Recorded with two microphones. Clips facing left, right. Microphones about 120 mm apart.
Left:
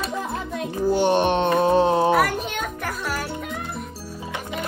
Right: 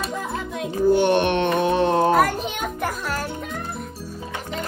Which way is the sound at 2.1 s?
5° left (ahead or behind).